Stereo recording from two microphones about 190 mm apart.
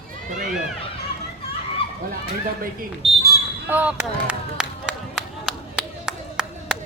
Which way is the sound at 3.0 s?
30° right (ahead or behind).